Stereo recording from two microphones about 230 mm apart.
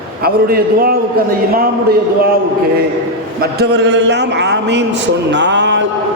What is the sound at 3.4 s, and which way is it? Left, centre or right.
A man's voice, right.